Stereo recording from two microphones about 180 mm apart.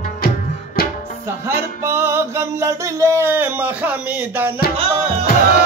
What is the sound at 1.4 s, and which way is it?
Music, 15° right (ahead or behind).